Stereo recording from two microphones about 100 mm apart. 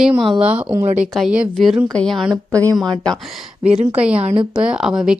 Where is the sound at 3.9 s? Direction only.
10° right (ahead or behind).